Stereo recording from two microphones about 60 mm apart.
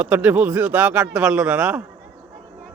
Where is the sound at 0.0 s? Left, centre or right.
Right.